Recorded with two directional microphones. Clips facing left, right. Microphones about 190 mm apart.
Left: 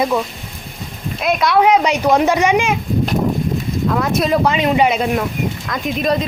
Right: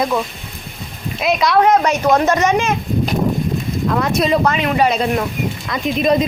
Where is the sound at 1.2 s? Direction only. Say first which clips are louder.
Even; centre (ahead or behind).